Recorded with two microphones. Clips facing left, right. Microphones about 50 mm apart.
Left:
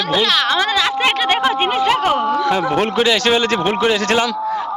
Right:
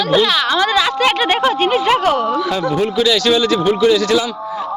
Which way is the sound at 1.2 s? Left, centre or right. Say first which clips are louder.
Right 1 dB; centre.